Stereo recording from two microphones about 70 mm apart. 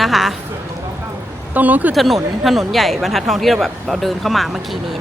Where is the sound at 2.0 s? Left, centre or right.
Centre.